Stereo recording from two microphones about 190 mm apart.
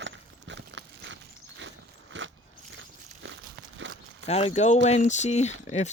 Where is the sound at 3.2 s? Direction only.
80° right.